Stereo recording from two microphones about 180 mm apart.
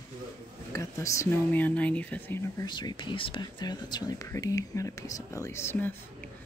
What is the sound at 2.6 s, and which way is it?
Speech, 25° left (ahead or behind).